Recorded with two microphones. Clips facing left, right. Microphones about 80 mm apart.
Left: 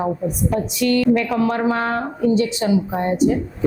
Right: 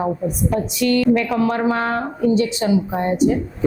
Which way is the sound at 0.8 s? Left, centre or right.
Centre.